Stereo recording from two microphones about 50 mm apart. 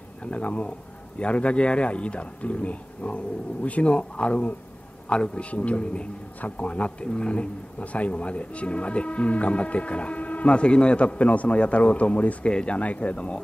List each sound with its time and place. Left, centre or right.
0.2 s a man's voice: left